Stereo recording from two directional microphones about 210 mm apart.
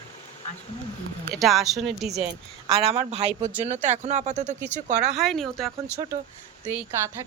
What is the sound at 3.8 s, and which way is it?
Speech, 35° right (ahead or behind).